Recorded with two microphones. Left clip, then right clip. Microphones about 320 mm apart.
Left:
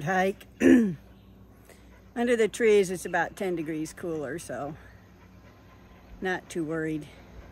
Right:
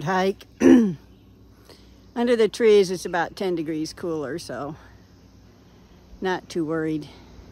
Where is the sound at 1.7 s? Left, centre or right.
Centre.